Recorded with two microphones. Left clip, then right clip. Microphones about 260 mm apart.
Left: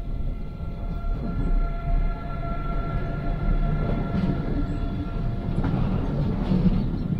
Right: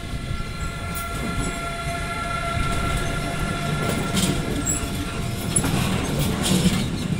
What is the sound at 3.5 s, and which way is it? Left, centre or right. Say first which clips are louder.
Train: right 5 dB; right.